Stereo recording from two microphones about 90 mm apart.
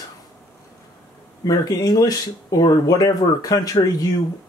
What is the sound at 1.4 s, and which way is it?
Speech, 45° left (ahead or behind).